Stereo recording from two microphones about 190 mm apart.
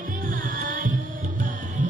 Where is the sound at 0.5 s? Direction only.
45° right (ahead or behind).